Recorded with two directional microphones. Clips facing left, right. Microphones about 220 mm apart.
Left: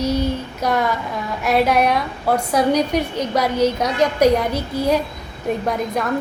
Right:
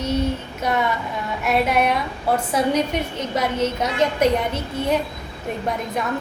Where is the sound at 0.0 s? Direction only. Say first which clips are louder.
Left 2 dB; centre (ahead or behind).